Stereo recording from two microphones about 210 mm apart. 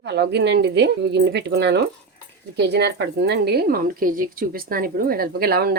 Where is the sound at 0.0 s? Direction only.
55° right (ahead or behind).